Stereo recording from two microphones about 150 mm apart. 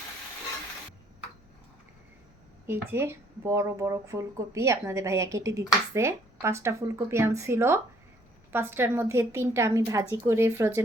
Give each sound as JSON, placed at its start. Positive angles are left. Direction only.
{"t": 2.6, "sound": "a woman's voice", "side_deg": -15}